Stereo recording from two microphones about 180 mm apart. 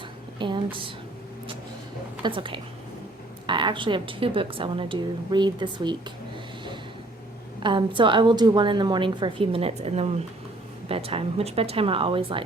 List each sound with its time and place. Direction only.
0.3 s a woman's voice: 25° right (ahead or behind)
2.2 s a woman's voice: 30° right (ahead or behind)
7.6 s a woman's voice: 25° right (ahead or behind)